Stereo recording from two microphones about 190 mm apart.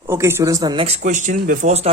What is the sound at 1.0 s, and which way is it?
Speech, 40° right (ahead or behind).